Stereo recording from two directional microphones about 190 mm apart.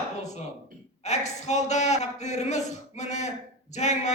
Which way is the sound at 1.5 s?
35° left (ahead or behind).